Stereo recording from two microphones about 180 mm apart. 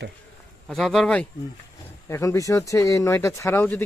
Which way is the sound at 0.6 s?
Centre (ahead or behind).